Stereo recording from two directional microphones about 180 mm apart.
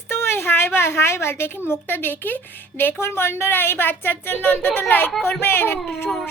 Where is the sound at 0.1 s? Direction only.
15° left (ahead or behind).